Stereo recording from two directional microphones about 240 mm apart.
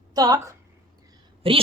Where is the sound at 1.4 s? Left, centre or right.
Right.